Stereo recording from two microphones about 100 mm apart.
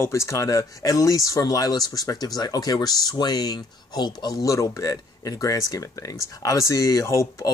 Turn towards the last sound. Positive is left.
turn(degrees=30)  # may be behind; listen again after turning